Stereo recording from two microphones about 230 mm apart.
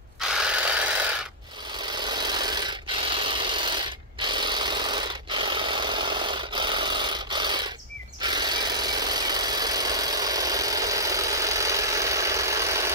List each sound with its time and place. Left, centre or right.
0.4 s jackhammer: centre
2.0 s rub: centre
8.2 s engine: centre